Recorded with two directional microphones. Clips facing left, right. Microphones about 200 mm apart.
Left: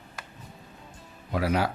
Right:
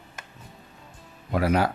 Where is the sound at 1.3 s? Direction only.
50° right (ahead or behind).